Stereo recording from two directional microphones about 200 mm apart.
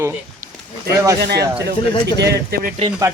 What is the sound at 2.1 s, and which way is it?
Speech, 55° right (ahead or behind).